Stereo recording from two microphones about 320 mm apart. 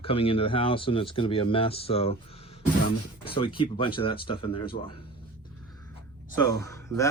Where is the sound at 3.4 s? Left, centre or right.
Centre.